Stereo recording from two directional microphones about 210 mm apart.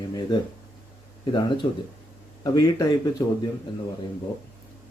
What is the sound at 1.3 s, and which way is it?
Speech, 20° left (ahead or behind).